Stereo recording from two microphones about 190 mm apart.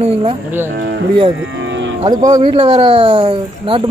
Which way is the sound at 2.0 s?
20° right (ahead or behind).